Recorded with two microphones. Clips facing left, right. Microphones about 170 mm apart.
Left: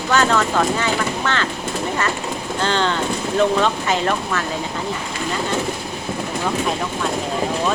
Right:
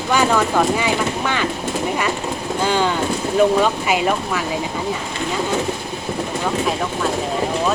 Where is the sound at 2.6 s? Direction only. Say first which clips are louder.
Right 1 dB; 10° right (ahead or behind).